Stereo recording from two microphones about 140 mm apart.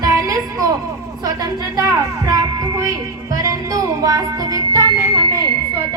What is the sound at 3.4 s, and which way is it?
Music, 25° right (ahead or behind).